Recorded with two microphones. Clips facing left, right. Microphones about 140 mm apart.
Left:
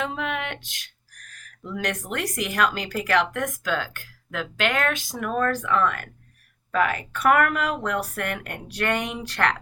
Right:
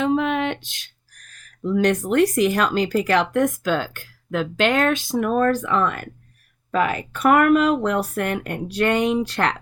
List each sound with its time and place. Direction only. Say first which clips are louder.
0.0 s speech: right 8 dB; 30° right (ahead or behind)